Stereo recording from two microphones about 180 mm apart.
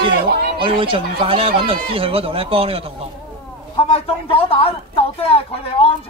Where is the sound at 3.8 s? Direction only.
30° left (ahead or behind).